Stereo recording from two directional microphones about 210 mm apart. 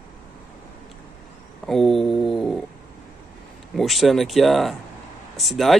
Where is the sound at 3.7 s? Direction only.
Centre (ahead or behind).